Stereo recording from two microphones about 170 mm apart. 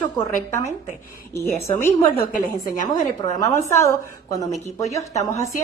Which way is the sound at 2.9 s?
20° left (ahead or behind).